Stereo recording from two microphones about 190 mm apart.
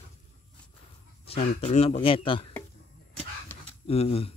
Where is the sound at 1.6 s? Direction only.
30° left (ahead or behind).